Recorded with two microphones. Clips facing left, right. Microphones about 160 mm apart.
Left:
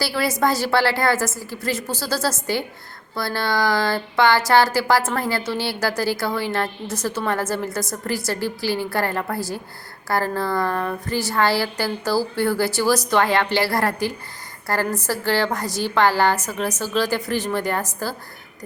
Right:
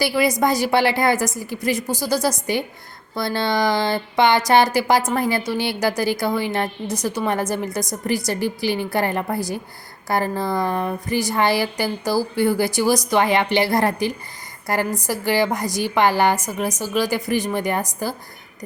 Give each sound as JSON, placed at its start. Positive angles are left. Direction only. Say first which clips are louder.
{"t": 0.0, "sound": "speech", "louder": "right 3 dB", "side_deg": -15}